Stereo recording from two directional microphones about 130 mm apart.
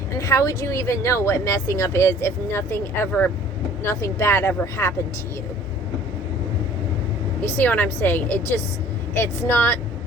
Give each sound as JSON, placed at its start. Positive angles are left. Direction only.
{"t": 0.2, "sound": "a woman's voice", "side_deg": 25}
{"t": 7.4, "sound": "a woman's voice", "side_deg": 15}